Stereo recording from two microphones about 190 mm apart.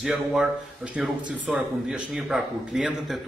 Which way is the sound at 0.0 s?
5° right (ahead or behind).